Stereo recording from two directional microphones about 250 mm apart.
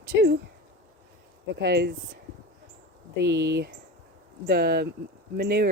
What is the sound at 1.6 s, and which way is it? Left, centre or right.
Speech, right.